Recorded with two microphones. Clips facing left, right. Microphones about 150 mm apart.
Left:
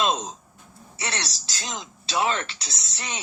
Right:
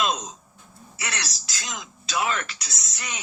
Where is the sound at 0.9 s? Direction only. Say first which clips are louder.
Left 2 dB; 30° left (ahead or behind).